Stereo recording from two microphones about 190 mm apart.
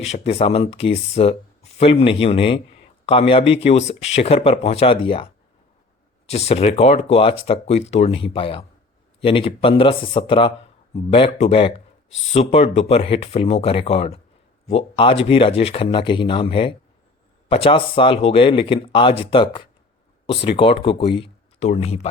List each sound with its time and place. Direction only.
0.0 s speech: 35° left (ahead or behind)